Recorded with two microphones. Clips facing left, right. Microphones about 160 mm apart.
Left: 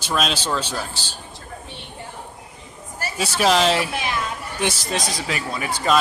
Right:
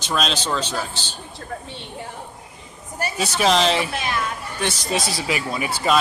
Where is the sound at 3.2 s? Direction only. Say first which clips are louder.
Left 1 dB; centre (ahead or behind).